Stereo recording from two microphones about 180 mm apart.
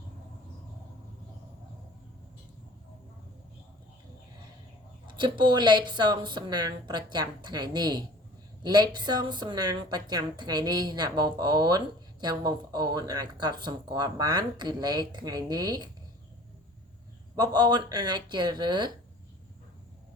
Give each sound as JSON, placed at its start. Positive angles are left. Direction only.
{"t": 5.0, "sound": "speech", "side_deg": -25}
{"t": 17.3, "sound": "speech", "side_deg": -20}